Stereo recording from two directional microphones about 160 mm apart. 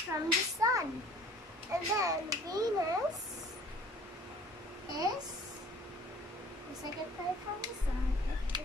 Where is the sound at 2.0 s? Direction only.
20° right (ahead or behind).